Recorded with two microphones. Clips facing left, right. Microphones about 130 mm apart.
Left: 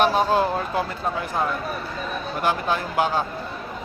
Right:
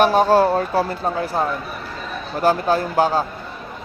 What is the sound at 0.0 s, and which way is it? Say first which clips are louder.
Speech: right 5 dB; 45° right (ahead or behind).